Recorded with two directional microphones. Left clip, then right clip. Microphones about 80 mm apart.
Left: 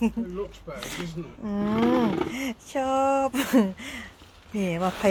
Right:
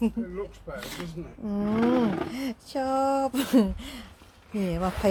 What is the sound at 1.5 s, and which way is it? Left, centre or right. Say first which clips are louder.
Speech: left 1 dB; right.